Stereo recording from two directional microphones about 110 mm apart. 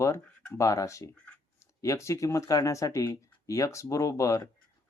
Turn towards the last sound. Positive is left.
turn(degrees=30)  # may be behind; listen again after turning